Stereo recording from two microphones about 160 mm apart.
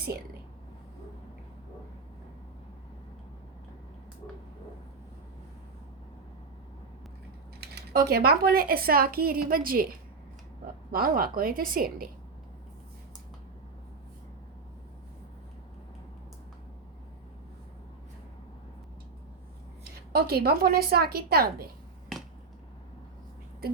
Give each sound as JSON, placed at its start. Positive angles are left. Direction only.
{"t": 7.8, "sound": "a woman's voice", "side_deg": -75}
{"t": 10.9, "sound": "a woman's voice", "side_deg": -65}
{"t": 20.1, "sound": "a woman's voice", "side_deg": -75}